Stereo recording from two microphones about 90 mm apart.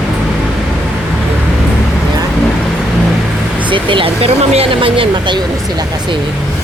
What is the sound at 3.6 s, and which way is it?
Speech, 65° right (ahead or behind).